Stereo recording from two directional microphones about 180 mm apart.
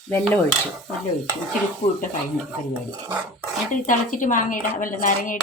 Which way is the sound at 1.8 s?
30° left (ahead or behind).